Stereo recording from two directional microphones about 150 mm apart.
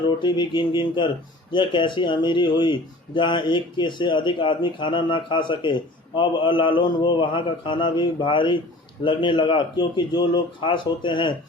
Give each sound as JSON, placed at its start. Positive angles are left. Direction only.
{"t": 0.2, "sound": "speech", "side_deg": 30}